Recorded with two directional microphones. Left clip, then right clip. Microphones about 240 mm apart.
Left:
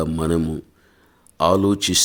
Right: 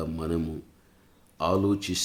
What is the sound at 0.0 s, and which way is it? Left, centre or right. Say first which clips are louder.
Speech: left 9 dB; left.